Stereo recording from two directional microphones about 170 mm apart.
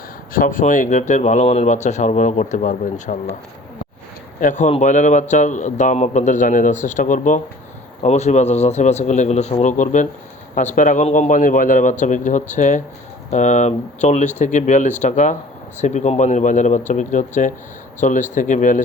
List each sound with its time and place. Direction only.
0.3 s speech: 55° left (ahead or behind)
4.4 s a man's voice: 50° left (ahead or behind)